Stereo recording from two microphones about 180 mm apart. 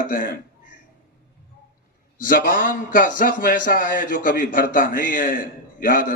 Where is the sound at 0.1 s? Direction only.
50° left (ahead or behind).